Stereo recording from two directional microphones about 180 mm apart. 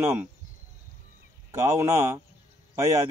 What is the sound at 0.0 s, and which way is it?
Speech, 15° right (ahead or behind).